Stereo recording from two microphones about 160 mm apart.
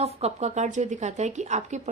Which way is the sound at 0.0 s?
40° right (ahead or behind).